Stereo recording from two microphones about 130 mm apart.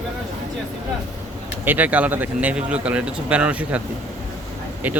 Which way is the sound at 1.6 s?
15° right (ahead or behind).